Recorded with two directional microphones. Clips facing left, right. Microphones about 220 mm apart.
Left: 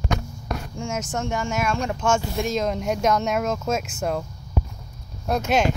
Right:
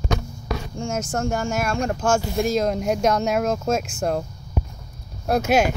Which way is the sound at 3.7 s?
5° left (ahead or behind).